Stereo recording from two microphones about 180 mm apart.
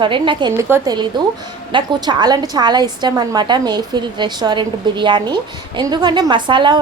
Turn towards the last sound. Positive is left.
turn(degrees=-25)  # may be behind; listen again after turning